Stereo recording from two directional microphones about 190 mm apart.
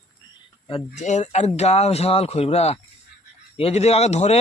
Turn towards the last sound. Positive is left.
turn(degrees=35)  # may be behind; listen again after turning